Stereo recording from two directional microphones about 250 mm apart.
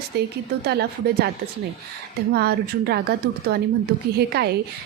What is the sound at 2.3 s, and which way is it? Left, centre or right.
A woman's voice, right.